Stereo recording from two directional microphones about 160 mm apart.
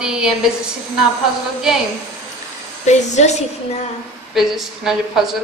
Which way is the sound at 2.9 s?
45° left (ahead or behind).